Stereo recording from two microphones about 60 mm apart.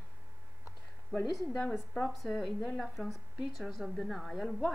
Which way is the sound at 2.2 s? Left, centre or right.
Centre.